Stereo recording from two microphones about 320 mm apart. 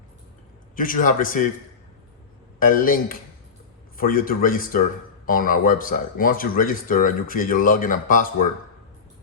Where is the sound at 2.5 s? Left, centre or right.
Left.